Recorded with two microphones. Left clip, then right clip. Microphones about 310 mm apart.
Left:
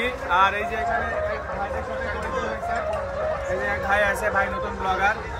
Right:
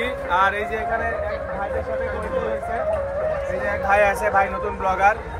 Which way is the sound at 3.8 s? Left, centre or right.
Centre.